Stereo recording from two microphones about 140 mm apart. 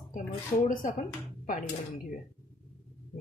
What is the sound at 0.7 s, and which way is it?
Speech, 75° left (ahead or behind).